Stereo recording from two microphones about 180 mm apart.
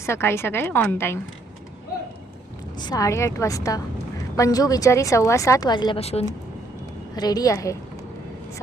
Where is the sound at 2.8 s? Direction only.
20° left (ahead or behind); by 6.2 s 35° left (ahead or behind).